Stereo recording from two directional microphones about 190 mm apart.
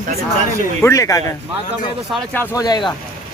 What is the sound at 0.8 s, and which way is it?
Speech, 15° left (ahead or behind).